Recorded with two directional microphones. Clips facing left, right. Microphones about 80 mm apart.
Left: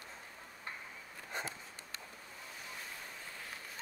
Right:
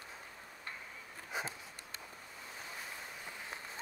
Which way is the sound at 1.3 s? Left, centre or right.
Centre.